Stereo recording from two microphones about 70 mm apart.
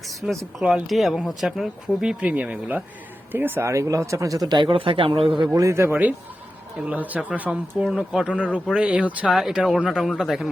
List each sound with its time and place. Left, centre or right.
0.1 s speech: centre
0.6 s speech: centre
0.9 s speech: centre; by 3.7 s right
3.7 s speech: right
4.4 s speech: right
5.5 s speech: right
6.7 s speech: right
9.3 s speech: centre